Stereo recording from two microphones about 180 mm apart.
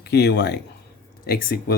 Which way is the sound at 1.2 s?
55° left (ahead or behind).